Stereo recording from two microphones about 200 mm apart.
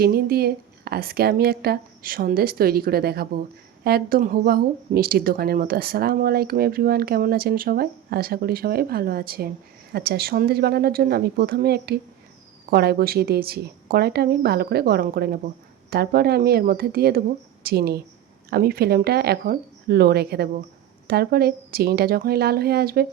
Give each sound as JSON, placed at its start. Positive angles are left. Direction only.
{"t": 0.0, "sound": "speech", "side_deg": -50}